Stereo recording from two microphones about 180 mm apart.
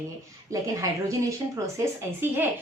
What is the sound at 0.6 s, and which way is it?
A woman's voice, 15° right (ahead or behind).